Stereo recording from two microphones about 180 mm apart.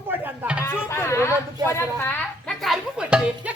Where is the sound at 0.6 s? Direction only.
15° left (ahead or behind).